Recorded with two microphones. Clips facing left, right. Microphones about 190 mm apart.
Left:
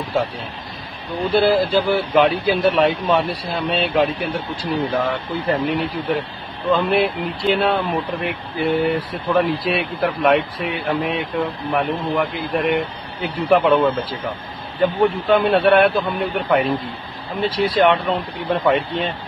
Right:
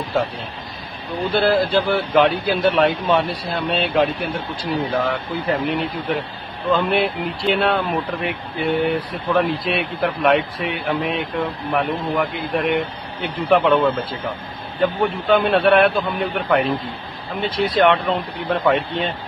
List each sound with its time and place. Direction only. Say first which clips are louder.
1.3 s a man's voice: left 1 dB; centre (ahead or behind)